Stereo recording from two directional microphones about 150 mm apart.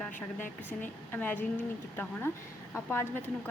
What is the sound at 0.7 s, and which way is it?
A woman's voice, 10° left (ahead or behind).